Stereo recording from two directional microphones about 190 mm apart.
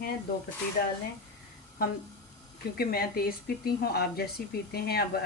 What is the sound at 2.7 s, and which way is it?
A woman's voice, 55° left (ahead or behind).